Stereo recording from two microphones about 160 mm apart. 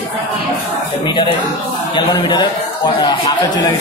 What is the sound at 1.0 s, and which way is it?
A man's voice, 30° left (ahead or behind).